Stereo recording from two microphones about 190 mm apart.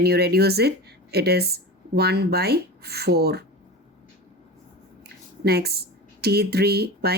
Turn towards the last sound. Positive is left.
turn(degrees=-55)  # may be behind; listen again after turning